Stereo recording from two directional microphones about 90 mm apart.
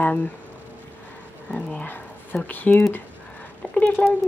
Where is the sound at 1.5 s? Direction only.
15° left (ahead or behind).